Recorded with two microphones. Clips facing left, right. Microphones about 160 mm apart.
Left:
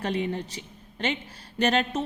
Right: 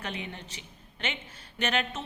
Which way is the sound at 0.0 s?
35° left (ahead or behind).